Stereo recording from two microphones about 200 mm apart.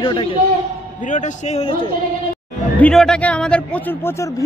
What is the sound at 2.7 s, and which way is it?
A man's voice, 5° left (ahead or behind).